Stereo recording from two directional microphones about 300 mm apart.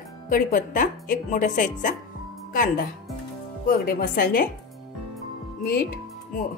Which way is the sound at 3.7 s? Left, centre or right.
Left.